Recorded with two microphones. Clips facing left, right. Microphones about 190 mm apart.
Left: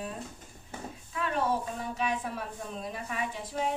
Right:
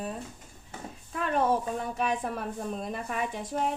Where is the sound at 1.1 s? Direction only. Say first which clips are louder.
Right 3 dB; 50° right (ahead or behind).